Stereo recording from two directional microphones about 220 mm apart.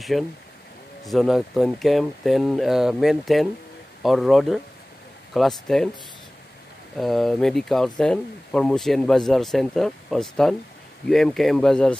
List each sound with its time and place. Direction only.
0.1 s speech: centre (ahead or behind)
7.0 s speech: centre (ahead or behind)